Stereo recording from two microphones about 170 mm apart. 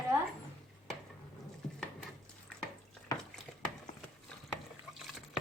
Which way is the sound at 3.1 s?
20° left (ahead or behind).